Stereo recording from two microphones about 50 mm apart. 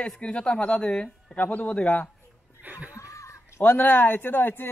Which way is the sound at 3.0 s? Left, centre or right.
Left.